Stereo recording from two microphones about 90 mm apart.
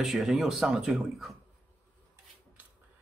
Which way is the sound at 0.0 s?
5° right (ahead or behind).